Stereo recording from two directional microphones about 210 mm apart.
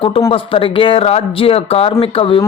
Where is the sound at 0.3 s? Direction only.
25° left (ahead or behind).